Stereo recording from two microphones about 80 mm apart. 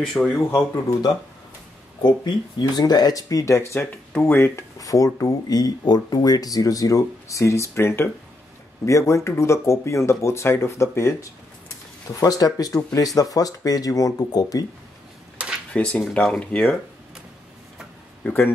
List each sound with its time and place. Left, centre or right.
0.0 s speech: centre
0.3 s speech: left
2.0 s speech: left
4.7 s speech: left
12.1 s speech: left
15.4 s a sound: centre
15.7 s speech: centre
18.2 s speech: left